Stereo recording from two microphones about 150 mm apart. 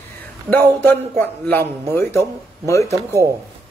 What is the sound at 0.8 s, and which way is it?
A man's voice, 15° left (ahead or behind).